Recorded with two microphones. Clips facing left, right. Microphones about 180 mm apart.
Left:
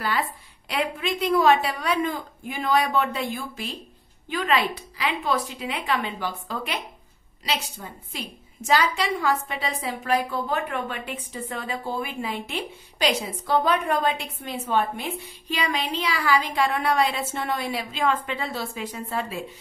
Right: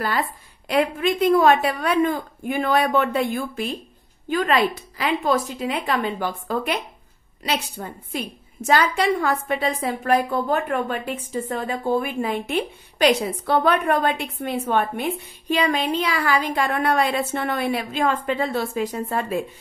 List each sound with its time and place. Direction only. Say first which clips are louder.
0.7 s a woman's voice: right 6 dB; 45° right (ahead or behind)